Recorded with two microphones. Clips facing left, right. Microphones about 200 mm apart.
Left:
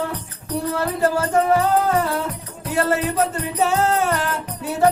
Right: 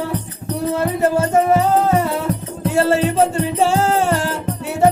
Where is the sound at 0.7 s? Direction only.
20° right (ahead or behind).